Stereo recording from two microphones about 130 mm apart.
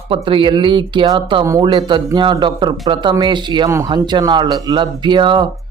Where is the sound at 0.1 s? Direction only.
40° right (ahead or behind).